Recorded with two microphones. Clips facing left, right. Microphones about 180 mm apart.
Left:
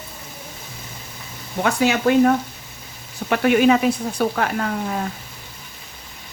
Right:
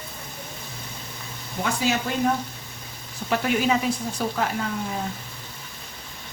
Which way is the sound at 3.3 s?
65° left (ahead or behind).